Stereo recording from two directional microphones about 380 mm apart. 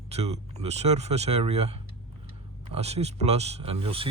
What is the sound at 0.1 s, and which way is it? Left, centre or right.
Speech, centre.